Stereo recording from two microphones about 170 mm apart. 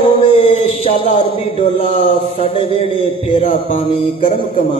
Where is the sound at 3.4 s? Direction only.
50° left (ahead or behind).